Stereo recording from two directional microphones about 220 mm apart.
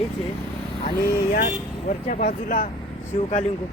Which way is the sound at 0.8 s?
40° left (ahead or behind).